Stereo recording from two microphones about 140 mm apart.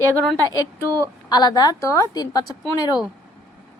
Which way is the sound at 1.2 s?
30° left (ahead or behind).